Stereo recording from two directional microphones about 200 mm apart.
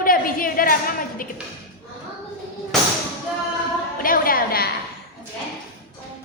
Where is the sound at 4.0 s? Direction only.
45° left (ahead or behind).